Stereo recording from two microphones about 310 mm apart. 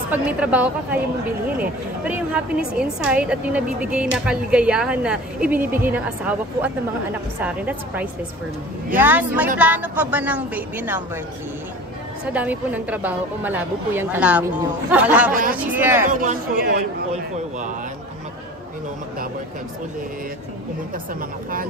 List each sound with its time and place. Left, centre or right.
0.1 s speech: centre
2.0 s speech: centre
12.3 s speech: centre
16.1 s speech: right